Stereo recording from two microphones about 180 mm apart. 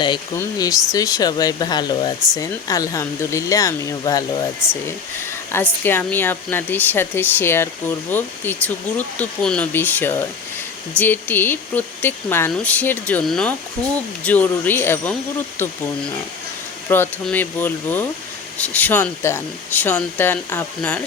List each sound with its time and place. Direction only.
0.3 s speech: 20° left (ahead or behind)
16.9 s speech: 10° left (ahead or behind)